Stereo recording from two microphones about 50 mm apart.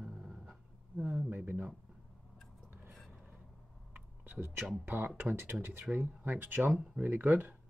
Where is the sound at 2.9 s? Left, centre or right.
Centre.